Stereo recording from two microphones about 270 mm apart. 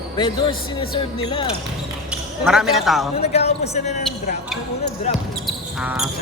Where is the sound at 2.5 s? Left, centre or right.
Centre.